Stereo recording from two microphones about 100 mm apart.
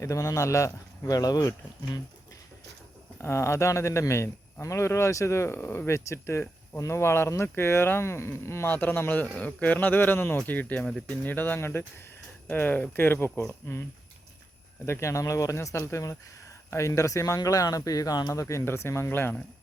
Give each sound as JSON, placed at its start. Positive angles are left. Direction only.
{"t": 0.0, "sound": "speech", "side_deg": 30}
{"t": 3.2, "sound": "speech", "side_deg": 30}
{"t": 14.8, "sound": "speech", "side_deg": 30}